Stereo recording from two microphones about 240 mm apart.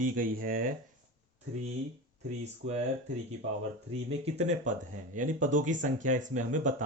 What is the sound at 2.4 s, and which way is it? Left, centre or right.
Speech, right.